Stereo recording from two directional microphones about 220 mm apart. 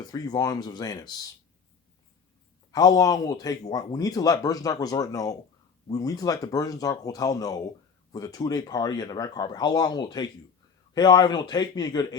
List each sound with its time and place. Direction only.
0.0 s speech: 15° left (ahead or behind)
2.7 s a man's voice: 15° left (ahead or behind)